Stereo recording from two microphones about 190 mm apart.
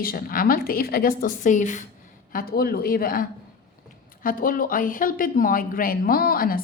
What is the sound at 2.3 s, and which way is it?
A woman's voice, 55° left (ahead or behind).